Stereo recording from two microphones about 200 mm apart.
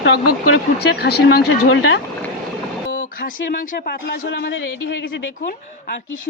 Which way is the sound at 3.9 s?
55° left (ahead or behind).